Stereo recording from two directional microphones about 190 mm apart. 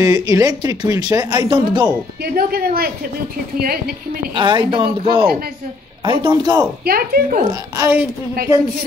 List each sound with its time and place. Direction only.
0.0 s speech: 20° right (ahead or behind)
2.3 s a woman's voice: 50° right (ahead or behind)
4.4 s speech: 25° right (ahead or behind)
6.8 s a woman's voice: 50° right (ahead or behind)
7.7 s speech: 15° right (ahead or behind)